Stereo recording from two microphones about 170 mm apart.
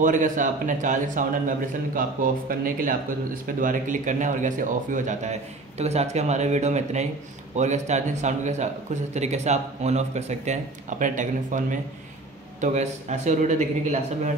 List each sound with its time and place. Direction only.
0.0 s a man's voice: 50° right (ahead or behind)